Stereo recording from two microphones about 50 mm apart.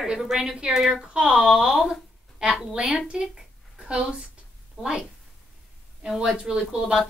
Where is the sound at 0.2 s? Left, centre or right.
Centre.